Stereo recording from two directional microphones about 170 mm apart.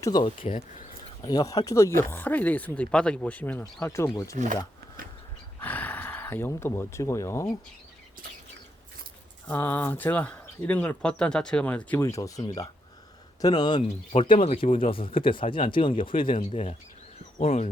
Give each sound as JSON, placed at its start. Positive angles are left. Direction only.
{"t": 0.0, "sound": "speech", "side_deg": 25}
{"t": 0.4, "sound": "speech", "side_deg": 50}
{"t": 1.2, "sound": "speech", "side_deg": 25}
{"t": 5.5, "sound": "speech", "side_deg": 10}
{"t": 9.5, "sound": "speech", "side_deg": 10}